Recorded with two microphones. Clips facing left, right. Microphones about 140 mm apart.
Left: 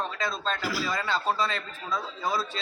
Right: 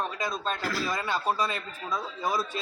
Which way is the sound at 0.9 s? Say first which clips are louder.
Left 1 dB; 15° right (ahead or behind).